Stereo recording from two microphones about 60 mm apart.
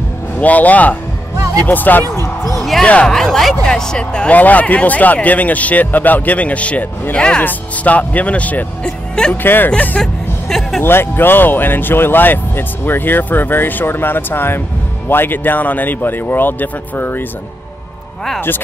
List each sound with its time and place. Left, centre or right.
0.4 s speech: left
2.8 s speech: left
3.1 s speech: centre
4.3 s speech: left
7.4 s speech: left
8.8 s speech: centre
9.3 s speech: left
9.7 s speech: centre
10.8 s speech: left